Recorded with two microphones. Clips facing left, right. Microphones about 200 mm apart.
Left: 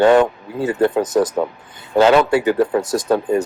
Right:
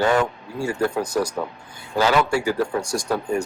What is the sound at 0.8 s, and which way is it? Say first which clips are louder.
Speech: left 7 dB; 20° left (ahead or behind).